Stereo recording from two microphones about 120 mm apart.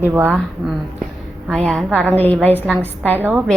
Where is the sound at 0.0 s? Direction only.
15° right (ahead or behind).